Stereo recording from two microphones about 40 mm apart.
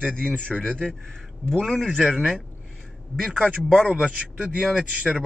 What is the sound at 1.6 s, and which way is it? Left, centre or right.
Speech, centre.